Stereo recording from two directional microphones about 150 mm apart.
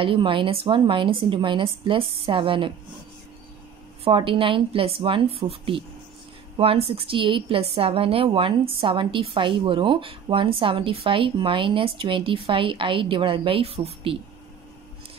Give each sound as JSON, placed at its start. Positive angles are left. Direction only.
{"t": 0.0, "sound": "a woman's voice", "side_deg": -35}
{"t": 4.0, "sound": "a woman's voice", "side_deg": -35}